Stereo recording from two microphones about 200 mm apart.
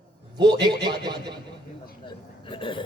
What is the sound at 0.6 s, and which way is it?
Speech, 20° right (ahead or behind).